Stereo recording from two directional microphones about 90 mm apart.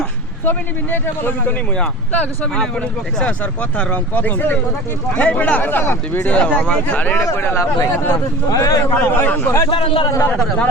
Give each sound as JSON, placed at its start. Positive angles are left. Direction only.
{"t": 0.4, "sound": "speech", "side_deg": 25}
{"t": 7.3, "sound": "speech", "side_deg": 35}
{"t": 7.9, "sound": "speech", "side_deg": 25}
{"t": 8.4, "sound": "speech", "side_deg": 40}
{"t": 9.0, "sound": "speech", "side_deg": 20}
{"t": 9.6, "sound": "a man's voice", "side_deg": 85}
{"t": 10.3, "sound": "speech", "side_deg": 5}